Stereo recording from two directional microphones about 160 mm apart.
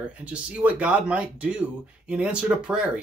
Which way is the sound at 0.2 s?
10° right (ahead or behind).